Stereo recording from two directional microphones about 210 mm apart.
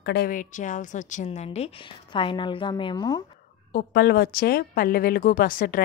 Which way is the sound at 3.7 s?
50° left (ahead or behind).